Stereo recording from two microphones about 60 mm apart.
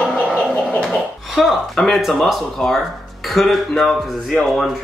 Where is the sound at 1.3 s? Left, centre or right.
Centre.